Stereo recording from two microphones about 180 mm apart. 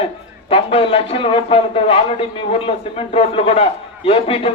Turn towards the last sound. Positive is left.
turn(degrees=30)  # may be behind; listen again after turning